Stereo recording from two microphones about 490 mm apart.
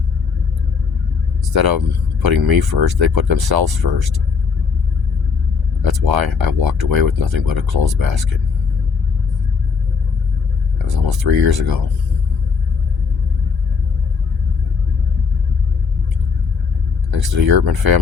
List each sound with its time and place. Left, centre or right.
1.5 s speech: right
5.8 s speech: right
10.8 s speech: right
17.1 s speech: right